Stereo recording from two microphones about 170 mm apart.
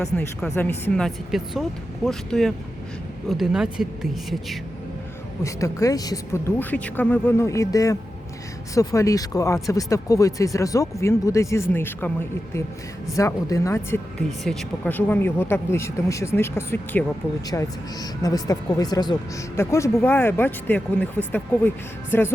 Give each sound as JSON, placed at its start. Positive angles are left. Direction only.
{"t": 0.5, "sound": "speech", "side_deg": 10}
{"t": 5.4, "sound": "speech", "side_deg": 20}
{"t": 13.1, "sound": "speech", "side_deg": 20}
{"t": 14.3, "sound": "speech", "side_deg": 0}